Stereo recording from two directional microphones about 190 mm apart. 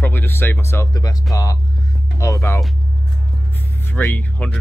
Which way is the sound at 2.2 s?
15° left (ahead or behind).